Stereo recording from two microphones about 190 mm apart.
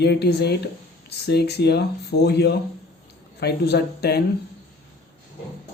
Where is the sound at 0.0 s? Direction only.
60° left (ahead or behind).